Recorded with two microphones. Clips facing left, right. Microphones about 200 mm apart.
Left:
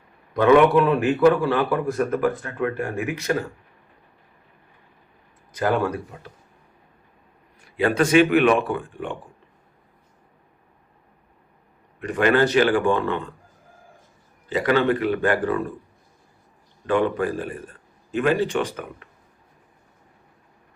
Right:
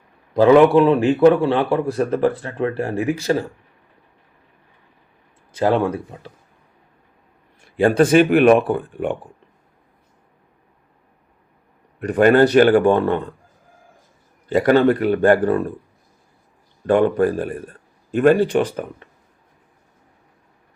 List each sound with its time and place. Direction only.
0.3 s a man's voice: 30° right (ahead or behind)
5.5 s a man's voice: 25° right (ahead or behind)
7.9 s a man's voice: 35° right (ahead or behind)
11.9 s a man's voice: 40° right (ahead or behind)
14.6 s speech: 45° right (ahead or behind)
16.8 s speech: 45° right (ahead or behind)